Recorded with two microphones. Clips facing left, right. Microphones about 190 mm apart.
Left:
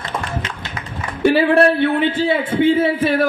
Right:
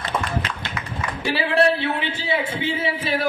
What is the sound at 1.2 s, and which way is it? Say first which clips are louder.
A man's voice: left 7 dB; 50° left (ahead or behind).